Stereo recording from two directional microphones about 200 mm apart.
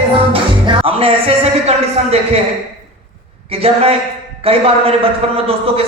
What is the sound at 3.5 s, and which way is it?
A man's voice, 30° right (ahead or behind).